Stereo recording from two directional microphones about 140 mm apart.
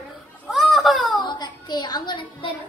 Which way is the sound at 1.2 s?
30° left (ahead or behind).